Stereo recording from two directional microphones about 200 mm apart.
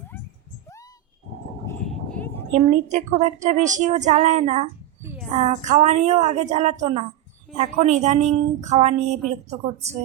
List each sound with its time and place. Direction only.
1.6 s vehicle: 5° left (ahead or behind)
2.5 s speech: 35° right (ahead or behind)
5.0 s a sound: 10° right (ahead or behind)
5.4 s speech: 35° right (ahead or behind)